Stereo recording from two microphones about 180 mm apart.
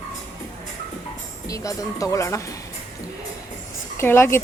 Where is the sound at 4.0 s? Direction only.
15° left (ahead or behind).